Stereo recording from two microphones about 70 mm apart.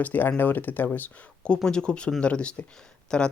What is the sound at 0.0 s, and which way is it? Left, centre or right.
Speech, left.